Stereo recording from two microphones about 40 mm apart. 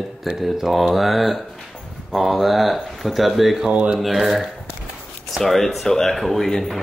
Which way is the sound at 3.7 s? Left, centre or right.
Right.